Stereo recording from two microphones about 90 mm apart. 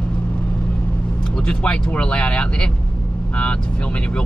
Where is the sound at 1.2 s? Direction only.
10° left (ahead or behind).